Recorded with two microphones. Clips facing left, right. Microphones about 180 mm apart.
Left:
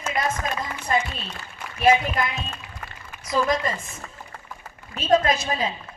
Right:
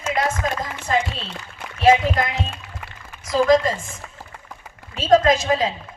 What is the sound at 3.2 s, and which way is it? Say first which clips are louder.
Speech: right 7 dB; 90° right.